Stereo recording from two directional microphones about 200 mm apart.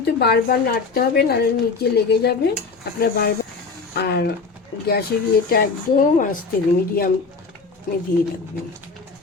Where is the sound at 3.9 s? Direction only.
55° left (ahead or behind).